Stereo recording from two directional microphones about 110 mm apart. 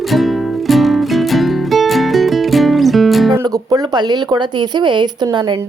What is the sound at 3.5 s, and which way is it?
A woman's voice, 35° right (ahead or behind).